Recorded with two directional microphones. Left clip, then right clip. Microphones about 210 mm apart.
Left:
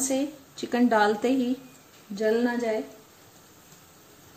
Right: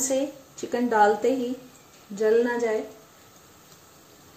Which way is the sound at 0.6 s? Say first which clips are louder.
Right 1 dB; 45° left (ahead or behind).